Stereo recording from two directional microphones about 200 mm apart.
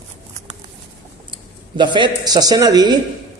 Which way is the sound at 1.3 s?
25° right (ahead or behind).